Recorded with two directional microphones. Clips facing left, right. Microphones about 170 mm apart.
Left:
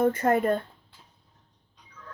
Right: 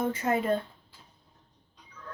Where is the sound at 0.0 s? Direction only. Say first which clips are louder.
Left 5 dB; 55° left (ahead or behind).